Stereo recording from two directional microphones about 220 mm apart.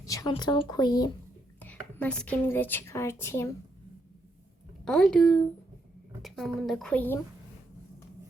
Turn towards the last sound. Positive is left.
turn(degrees=10)  # may be behind; listen again after turning